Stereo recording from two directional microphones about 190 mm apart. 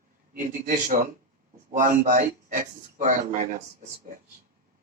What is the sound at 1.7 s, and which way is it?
A man's voice, 45° right (ahead or behind).